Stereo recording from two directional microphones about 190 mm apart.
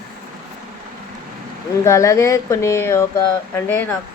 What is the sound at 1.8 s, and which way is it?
Speech, 15° left (ahead or behind).